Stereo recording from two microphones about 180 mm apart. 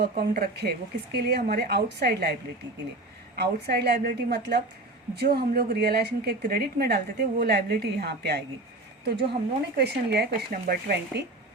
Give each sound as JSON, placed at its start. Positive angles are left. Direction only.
{"t": 0.0, "sound": "a woman's voice", "side_deg": -65}
{"t": 3.3, "sound": "a woman's voice", "side_deg": -65}
{"t": 9.7, "sound": "a woman's voice", "side_deg": -65}